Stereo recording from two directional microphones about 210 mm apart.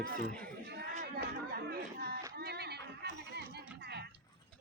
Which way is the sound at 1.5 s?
45° right (ahead or behind).